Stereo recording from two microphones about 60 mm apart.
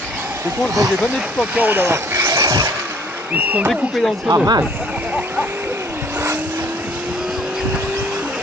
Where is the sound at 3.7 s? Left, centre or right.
Centre.